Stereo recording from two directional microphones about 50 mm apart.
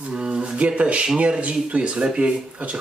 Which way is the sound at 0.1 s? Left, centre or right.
Right.